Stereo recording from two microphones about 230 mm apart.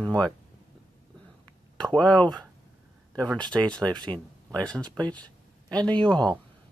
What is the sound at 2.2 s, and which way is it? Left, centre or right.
Speech, centre.